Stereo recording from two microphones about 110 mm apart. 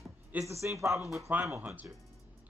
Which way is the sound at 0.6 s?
25° right (ahead or behind).